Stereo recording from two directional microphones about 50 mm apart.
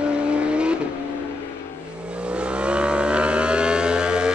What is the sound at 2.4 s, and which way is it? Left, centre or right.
Vehicle, right.